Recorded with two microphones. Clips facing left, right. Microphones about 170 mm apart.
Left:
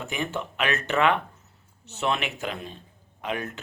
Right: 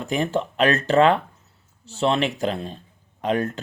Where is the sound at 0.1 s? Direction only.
35° right (ahead or behind).